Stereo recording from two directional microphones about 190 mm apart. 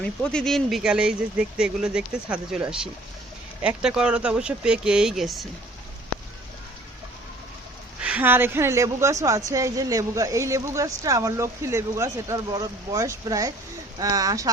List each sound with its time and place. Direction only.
0.0 s speech: 5° left (ahead or behind)
8.0 s a woman's voice: 10° right (ahead or behind)